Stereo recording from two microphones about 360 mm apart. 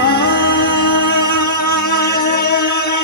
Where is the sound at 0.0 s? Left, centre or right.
Left.